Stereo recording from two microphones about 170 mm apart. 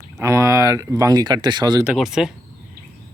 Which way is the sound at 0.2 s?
15° right (ahead or behind).